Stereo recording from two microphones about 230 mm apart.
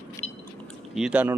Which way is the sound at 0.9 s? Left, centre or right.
Centre.